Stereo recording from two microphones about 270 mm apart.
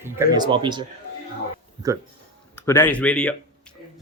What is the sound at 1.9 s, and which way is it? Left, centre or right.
Speech, centre.